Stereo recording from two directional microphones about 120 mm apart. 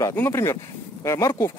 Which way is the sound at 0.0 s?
20° left (ahead or behind).